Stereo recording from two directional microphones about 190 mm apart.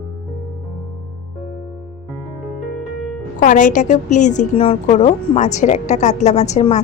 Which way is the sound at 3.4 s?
45° left (ahead or behind).